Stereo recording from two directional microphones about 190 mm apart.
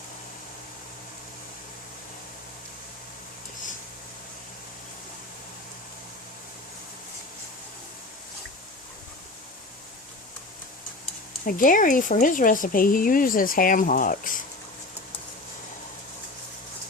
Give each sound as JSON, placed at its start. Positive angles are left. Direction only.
{"t": 11.4, "sound": "speech", "side_deg": 45}